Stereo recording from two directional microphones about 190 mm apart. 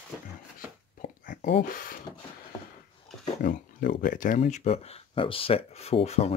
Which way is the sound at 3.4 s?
45° left (ahead or behind).